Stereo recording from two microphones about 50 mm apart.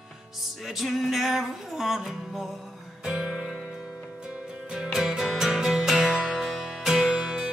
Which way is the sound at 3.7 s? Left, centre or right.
Centre.